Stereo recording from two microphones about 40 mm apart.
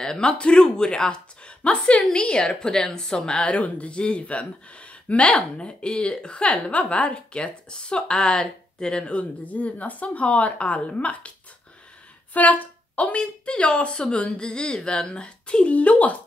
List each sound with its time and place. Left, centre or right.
0.0 s a woman's voice: centre
3.4 s a woman's voice: left
5.3 s a woman's voice: left
9.4 s a woman's voice: left
12.4 s speech: left
13.2 s a woman's voice: left